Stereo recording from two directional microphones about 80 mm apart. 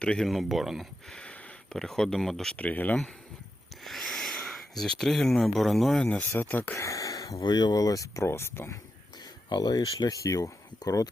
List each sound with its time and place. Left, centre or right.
0.0 s speech: centre
0.3 s speech: centre
1.1 s speech: centre
2.6 s speech: centre
3.8 s speech: centre
6.3 s speech: left
6.7 s a sound: left
7.4 s speech: left
9.5 s speech: left